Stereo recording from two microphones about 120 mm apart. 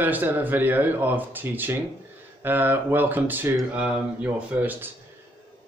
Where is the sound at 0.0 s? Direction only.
15° right (ahead or behind).